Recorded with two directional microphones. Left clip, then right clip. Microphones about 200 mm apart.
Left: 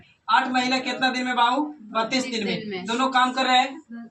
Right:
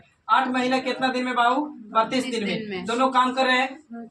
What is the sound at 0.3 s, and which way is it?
A man's voice, 15° right (ahead or behind).